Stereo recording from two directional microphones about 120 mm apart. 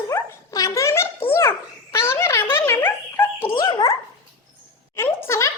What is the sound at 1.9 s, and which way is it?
Dog, 20° left (ahead or behind).